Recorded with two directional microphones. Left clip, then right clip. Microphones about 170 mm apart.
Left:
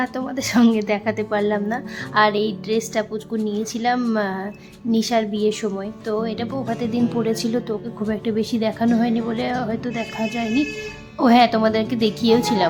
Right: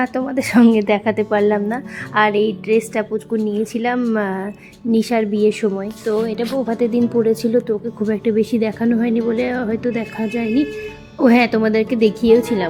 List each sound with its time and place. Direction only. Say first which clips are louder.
0.0 s a woman's voice: right 5 dB; 15° right (ahead or behind)
7.2 s a woman's voice: right 6 dB; 5° right (ahead or behind)